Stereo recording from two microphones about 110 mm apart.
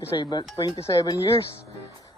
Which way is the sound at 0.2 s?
40° left (ahead or behind).